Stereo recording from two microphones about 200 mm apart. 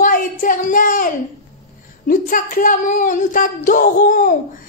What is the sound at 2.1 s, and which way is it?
Male singing, 45° left (ahead or behind).